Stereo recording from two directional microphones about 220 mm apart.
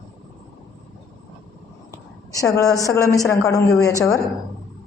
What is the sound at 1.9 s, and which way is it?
A woman's voice, 15° left (ahead or behind).